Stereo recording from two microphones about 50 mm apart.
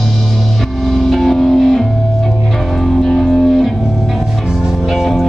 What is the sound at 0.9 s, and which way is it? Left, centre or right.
Music, centre.